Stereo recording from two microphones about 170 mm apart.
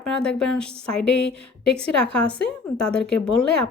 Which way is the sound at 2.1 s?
5° left (ahead or behind).